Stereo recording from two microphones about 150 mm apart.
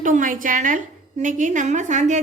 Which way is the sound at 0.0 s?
60° right (ahead or behind).